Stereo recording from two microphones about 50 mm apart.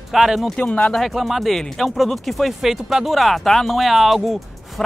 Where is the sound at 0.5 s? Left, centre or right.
Left.